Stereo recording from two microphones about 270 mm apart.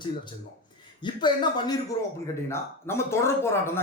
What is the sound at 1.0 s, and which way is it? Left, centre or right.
Speech, centre.